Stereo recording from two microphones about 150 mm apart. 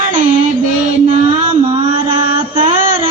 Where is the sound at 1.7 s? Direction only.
35° right (ahead or behind).